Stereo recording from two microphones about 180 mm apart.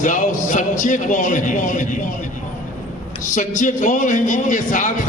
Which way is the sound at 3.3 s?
45° left (ahead or behind).